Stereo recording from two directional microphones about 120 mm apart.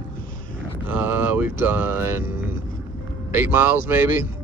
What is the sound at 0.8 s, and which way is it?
Speech, 15° right (ahead or behind).